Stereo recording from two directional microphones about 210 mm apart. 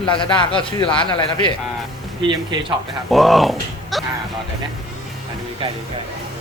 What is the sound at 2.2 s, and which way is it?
Speech, 25° right (ahead or behind).